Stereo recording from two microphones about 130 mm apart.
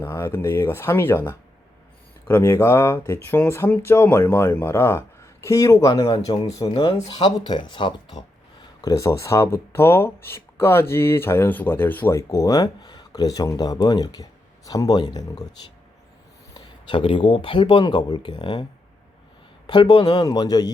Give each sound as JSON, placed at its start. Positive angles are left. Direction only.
{"t": 0.0, "sound": "speech", "side_deg": 20}
{"t": 8.8, "sound": "speech", "side_deg": 25}
{"t": 16.6, "sound": "speech", "side_deg": 40}
{"t": 19.6, "sound": "speech", "side_deg": 40}